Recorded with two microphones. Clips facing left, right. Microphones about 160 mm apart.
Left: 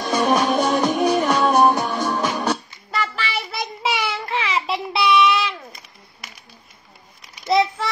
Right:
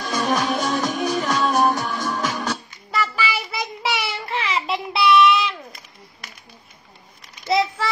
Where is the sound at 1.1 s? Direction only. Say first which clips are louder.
Left 4 dB; 60° left (ahead or behind).